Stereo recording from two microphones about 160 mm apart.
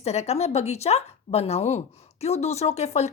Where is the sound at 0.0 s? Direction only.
40° left (ahead or behind).